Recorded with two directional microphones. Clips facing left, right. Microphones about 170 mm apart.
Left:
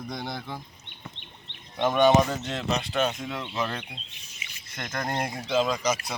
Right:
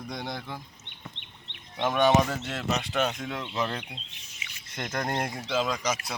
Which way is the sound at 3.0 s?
15° left (ahead or behind).